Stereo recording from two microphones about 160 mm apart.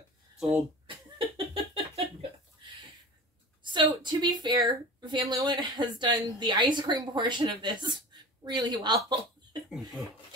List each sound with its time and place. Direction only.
0.4 s speech: 10° right (ahead or behind)
0.8 s laughter: 35° right (ahead or behind)
3.6 s a woman's voice: 30° right (ahead or behind)